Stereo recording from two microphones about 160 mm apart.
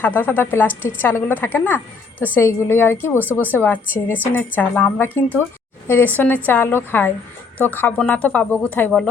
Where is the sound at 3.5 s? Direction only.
10° left (ahead or behind).